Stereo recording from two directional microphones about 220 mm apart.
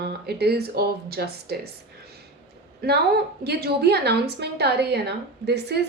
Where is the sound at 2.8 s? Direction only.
45° right (ahead or behind).